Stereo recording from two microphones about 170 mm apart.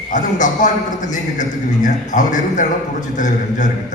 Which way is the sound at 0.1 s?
45° left (ahead or behind).